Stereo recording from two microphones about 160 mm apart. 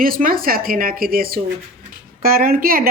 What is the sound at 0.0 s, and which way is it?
A woman's voice, 60° right (ahead or behind).